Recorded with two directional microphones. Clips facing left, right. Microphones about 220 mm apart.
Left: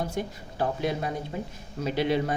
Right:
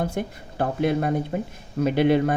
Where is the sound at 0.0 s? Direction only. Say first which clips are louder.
Right 4 dB; 55° right (ahead or behind).